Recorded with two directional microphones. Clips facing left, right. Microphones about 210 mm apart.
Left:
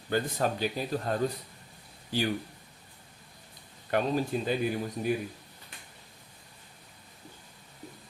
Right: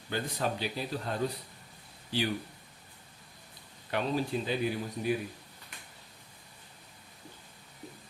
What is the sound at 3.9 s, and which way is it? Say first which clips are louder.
Speech: left 3 dB; 45° left (ahead or behind).